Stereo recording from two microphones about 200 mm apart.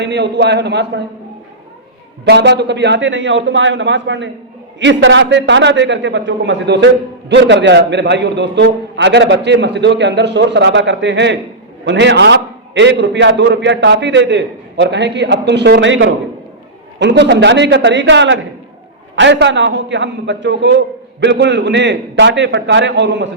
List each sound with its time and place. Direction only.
0.0 s a man's voice: 60° right (ahead or behind)
2.2 s a man's voice: 60° right (ahead or behind)